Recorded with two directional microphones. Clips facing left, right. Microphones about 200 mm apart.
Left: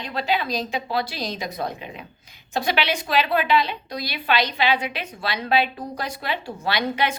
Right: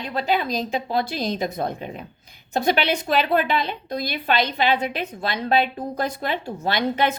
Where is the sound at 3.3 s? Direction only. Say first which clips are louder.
Even; 50° right (ahead or behind).